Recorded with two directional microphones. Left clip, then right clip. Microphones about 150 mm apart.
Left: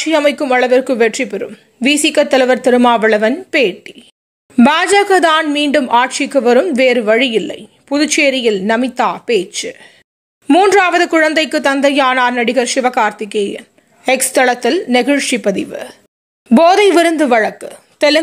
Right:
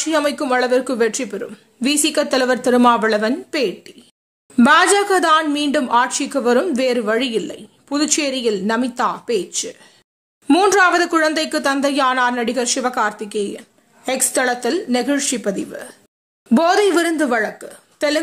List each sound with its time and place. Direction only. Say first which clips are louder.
0.0 s speech: left 6 dB; 10° left (ahead or behind)
10.4 s a woman's voice: left 5 dB; centre (ahead or behind)
10.7 s speech: left 3 dB; 15° left (ahead or behind)